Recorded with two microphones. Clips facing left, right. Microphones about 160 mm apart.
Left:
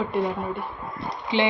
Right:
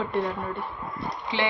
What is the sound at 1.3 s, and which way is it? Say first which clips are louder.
Speech: left 5 dB; 20° left (ahead or behind).